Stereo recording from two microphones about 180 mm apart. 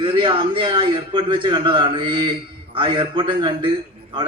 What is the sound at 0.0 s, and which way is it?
A man's voice, 30° right (ahead or behind).